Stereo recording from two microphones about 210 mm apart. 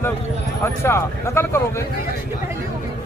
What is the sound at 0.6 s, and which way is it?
Speech, 10° left (ahead or behind).